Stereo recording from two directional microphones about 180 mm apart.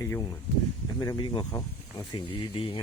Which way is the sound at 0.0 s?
15° left (ahead or behind).